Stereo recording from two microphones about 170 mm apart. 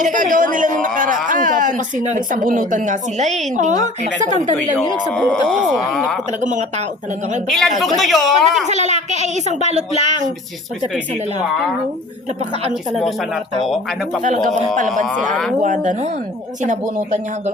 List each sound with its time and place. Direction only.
0.0 s a man's voice: 50° right (ahead or behind)
5.1 s speech: 5° left (ahead or behind)
6.4 s a man's voice: 45° right (ahead or behind)
7.4 s speech: centre (ahead or behind)
9.2 s a man's voice: 45° right (ahead or behind)
15.6 s a man's voice: 45° right (ahead or behind)